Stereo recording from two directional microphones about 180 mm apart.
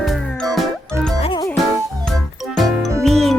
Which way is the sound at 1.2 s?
25° left (ahead or behind).